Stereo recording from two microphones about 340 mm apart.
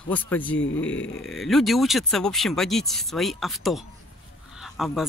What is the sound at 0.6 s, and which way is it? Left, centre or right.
Speech, left.